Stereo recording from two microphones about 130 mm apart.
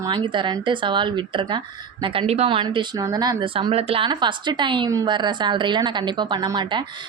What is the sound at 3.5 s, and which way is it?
Speech, 45° right (ahead or behind).